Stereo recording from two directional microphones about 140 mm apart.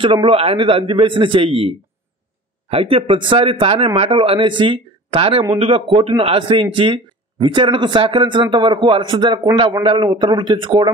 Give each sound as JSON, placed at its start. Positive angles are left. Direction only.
{"t": 0.0, "sound": "a man's voice", "side_deg": -40}